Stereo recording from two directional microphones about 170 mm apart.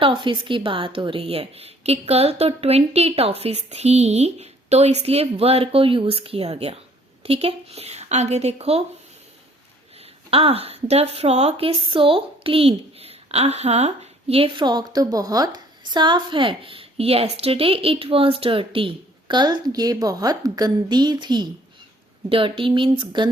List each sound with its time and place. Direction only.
0.0 s a woman's voice: 30° right (ahead or behind)
10.2 s a woman's voice: 35° right (ahead or behind)